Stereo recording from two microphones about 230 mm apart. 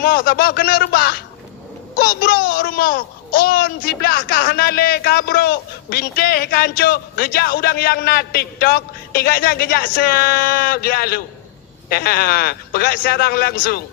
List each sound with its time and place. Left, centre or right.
0.0 s speech: left